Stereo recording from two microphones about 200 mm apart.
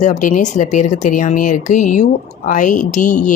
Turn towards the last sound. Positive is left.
turn(degrees=40)  # may be behind; listen again after turning